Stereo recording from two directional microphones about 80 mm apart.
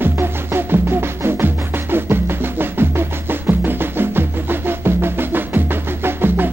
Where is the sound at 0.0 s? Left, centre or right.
Right.